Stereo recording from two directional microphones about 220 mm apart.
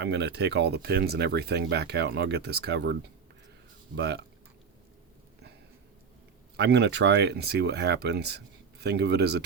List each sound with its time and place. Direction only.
0.0 s speech: 50° right (ahead or behind)
3.9 s speech: 50° right (ahead or behind)
6.6 s speech: 50° right (ahead or behind)